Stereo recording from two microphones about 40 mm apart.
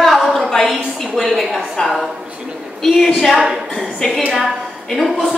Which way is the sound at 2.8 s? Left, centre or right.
Centre.